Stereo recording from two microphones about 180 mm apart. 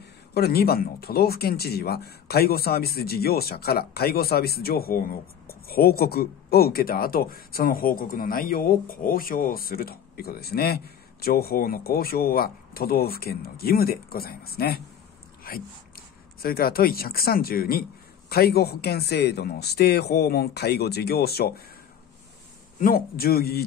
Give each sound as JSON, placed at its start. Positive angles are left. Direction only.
{"t": 0.3, "sound": "speech", "side_deg": 60}
{"t": 22.8, "sound": "speech", "side_deg": 50}